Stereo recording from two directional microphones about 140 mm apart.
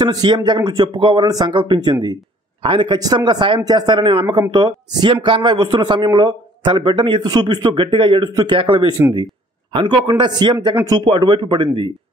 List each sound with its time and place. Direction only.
0.0 s a man's voice: 30° right (ahead or behind)